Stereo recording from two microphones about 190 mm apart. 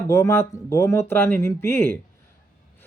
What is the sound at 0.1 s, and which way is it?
Speech, 15° left (ahead or behind).